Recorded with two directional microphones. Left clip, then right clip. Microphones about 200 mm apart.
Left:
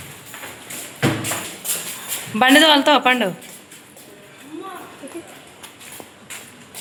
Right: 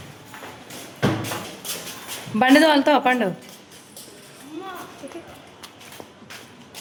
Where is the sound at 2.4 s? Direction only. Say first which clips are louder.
Left 3 dB; 10° right (ahead or behind).